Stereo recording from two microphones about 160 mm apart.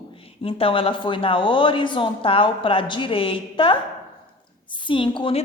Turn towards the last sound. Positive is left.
turn(degrees=30)  # may be behind; listen again after turning